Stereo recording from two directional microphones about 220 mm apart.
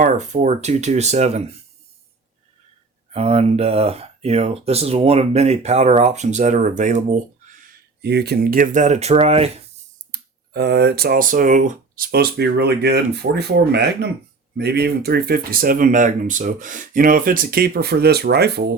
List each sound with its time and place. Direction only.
0.0 s speech: 35° right (ahead or behind)
3.1 s speech: 30° right (ahead or behind)
8.0 s speech: 50° right (ahead or behind); by 9.5 s 25° right (ahead or behind)
10.5 s speech: 50° right (ahead or behind)